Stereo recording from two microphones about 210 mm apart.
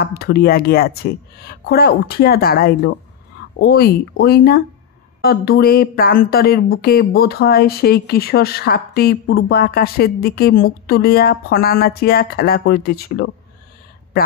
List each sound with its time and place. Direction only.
0.0 s speech: 50° left (ahead or behind)